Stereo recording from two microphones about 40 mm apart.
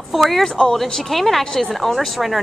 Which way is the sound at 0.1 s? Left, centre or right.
Centre.